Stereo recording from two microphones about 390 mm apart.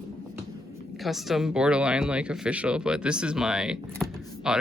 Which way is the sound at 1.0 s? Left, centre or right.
Centre.